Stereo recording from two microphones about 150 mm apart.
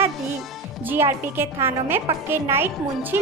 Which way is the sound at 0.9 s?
15° right (ahead or behind).